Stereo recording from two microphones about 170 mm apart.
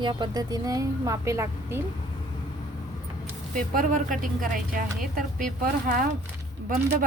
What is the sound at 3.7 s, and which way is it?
Speech, 50° right (ahead or behind).